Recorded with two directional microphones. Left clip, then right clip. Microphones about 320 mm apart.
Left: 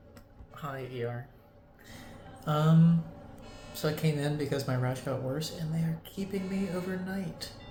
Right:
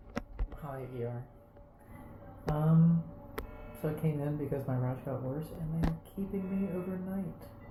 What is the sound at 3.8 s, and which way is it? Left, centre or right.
Speech, left.